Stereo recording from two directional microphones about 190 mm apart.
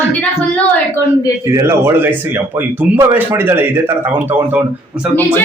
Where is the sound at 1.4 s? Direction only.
15° right (ahead or behind).